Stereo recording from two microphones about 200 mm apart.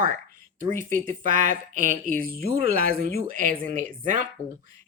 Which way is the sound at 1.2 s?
40° right (ahead or behind).